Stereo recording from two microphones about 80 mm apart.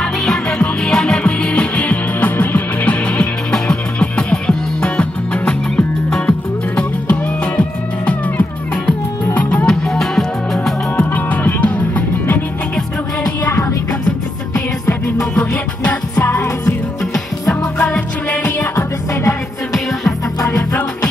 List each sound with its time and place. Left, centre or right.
0.0 s music: centre
11.0 s music: left
15.1 s music: centre
18.6 s music: left
19.7 s music: centre